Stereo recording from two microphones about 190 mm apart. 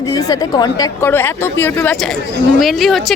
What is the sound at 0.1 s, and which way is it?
A woman's voice, 20° left (ahead or behind).